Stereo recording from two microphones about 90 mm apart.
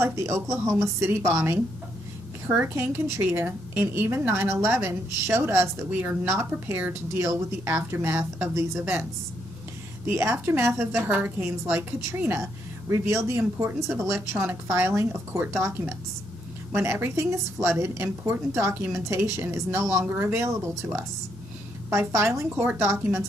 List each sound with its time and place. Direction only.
0.0 s a woman's voice: 30° right (ahead or behind)
10.1 s a woman's voice: 30° right (ahead or behind)
22.1 s a woman's voice: 30° right (ahead or behind)